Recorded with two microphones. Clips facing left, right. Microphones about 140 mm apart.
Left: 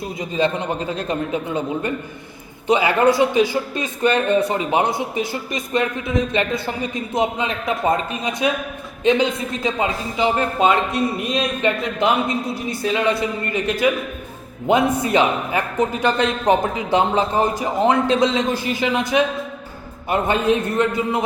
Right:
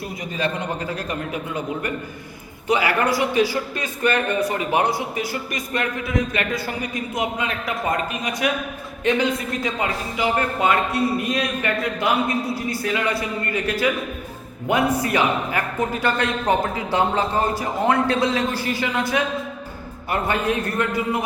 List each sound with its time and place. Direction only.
0.2 s a man's voice: 25° left (ahead or behind)